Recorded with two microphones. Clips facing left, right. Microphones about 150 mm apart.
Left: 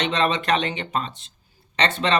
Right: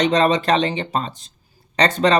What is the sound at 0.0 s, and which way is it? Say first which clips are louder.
Speech: right 6 dB; 35° right (ahead or behind).